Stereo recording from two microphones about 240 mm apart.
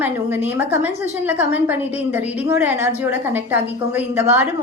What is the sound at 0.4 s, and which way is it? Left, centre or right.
A woman's voice, centre.